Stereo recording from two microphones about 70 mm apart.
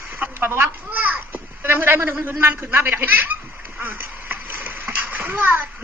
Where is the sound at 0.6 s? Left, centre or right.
Right.